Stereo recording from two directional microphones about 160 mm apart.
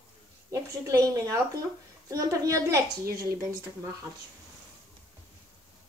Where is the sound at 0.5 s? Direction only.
20° right (ahead or behind).